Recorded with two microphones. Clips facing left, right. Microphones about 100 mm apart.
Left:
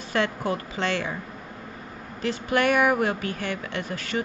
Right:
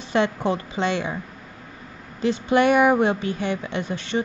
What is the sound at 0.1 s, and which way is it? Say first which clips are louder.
Speech: right 4 dB; 20° right (ahead or behind).